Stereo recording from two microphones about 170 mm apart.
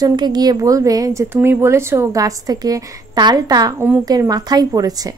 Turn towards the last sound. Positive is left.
turn(degrees=-20)  # may be behind; listen again after turning